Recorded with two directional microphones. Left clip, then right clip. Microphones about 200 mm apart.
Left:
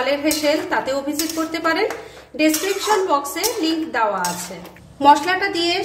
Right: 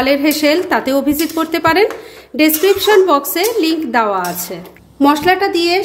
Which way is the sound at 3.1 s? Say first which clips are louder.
Right 6 dB; 45° right (ahead or behind).